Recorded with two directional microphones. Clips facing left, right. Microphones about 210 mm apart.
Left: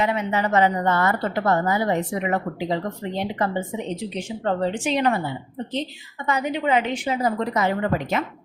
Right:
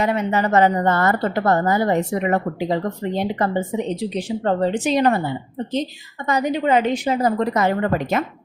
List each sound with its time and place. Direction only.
0.0 s a woman's voice: 40° right (ahead or behind)
6.2 s speech: 40° right (ahead or behind)